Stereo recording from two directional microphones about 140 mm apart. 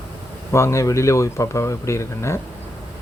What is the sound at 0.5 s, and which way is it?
Speech, 20° left (ahead or behind).